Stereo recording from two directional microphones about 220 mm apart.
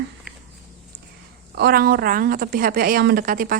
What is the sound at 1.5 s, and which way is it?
A woman's voice, 45° right (ahead or behind).